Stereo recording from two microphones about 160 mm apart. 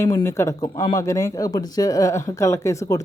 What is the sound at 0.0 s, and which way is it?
Speech, 15° left (ahead or behind).